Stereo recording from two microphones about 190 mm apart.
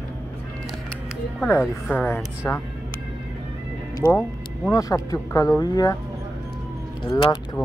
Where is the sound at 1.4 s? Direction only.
5° left (ahead or behind).